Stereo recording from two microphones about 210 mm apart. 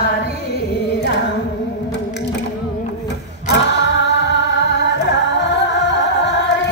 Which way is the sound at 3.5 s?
55° left (ahead or behind).